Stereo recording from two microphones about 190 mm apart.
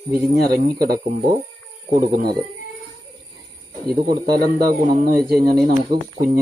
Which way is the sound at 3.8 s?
55° right (ahead or behind).